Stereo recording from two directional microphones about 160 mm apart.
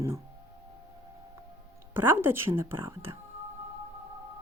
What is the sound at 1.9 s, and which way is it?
Speech, 15° right (ahead or behind).